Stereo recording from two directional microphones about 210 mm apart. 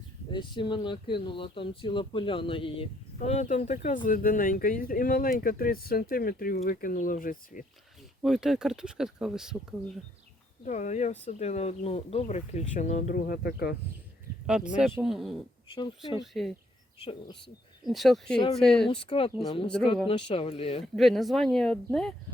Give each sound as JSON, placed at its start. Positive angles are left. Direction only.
{"t": 0.3, "sound": "speech", "side_deg": 20}
{"t": 8.2, "sound": "speech", "side_deg": 0}
{"t": 10.7, "sound": "speech", "side_deg": 35}
{"t": 14.4, "sound": "speech", "side_deg": -5}
{"t": 17.0, "sound": "speech", "side_deg": 25}
{"t": 17.8, "sound": "speech", "side_deg": 0}
{"t": 18.9, "sound": "speech", "side_deg": 25}
{"t": 19.6, "sound": "speech", "side_deg": 5}
{"t": 20.1, "sound": "speech", "side_deg": 25}
{"t": 20.8, "sound": "speech", "side_deg": 0}